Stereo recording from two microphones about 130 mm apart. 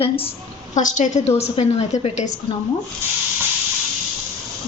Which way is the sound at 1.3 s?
55° left (ahead or behind).